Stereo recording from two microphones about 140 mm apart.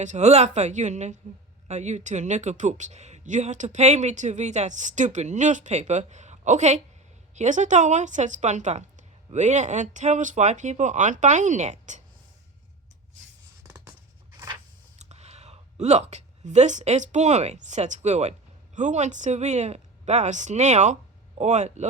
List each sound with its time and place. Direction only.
0.0 s speech: 55° right (ahead or behind)
14.9 s speech: 50° right (ahead or behind)